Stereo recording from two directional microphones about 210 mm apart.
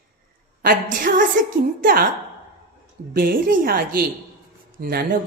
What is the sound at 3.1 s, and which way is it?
A woman's voice, 45° right (ahead or behind).